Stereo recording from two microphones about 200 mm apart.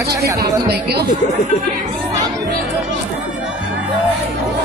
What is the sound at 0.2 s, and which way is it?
Speech, 55° right (ahead or behind).